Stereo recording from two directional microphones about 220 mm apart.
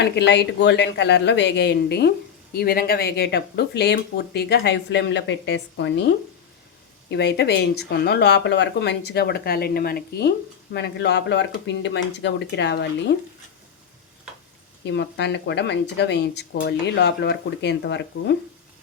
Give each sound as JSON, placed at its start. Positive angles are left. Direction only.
{"t": 0.0, "sound": "speech", "side_deg": 50}
{"t": 14.8, "sound": "speech", "side_deg": 55}